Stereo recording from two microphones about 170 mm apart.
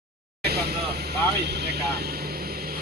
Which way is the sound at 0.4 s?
70° right (ahead or behind).